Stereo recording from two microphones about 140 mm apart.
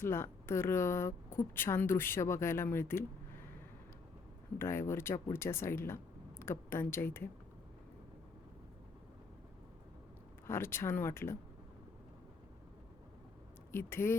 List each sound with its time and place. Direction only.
0.0 s speech: 15° left (ahead or behind)
4.5 s speech: 20° left (ahead or behind)
10.4 s speech: 15° left (ahead or behind)
13.7 s speech: 15° left (ahead or behind)